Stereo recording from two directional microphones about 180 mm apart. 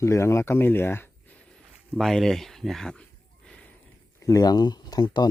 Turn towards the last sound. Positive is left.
turn(degrees=25)  # may be behind; listen again after turning